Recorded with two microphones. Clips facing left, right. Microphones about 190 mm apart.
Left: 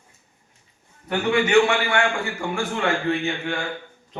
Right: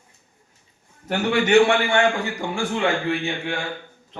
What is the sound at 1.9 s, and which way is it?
Speech, 15° right (ahead or behind).